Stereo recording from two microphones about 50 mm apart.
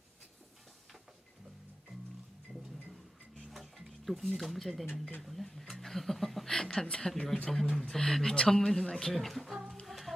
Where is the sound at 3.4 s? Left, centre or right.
Centre.